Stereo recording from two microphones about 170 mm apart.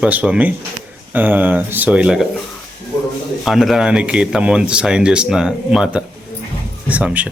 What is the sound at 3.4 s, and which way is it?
Speech, centre (ahead or behind).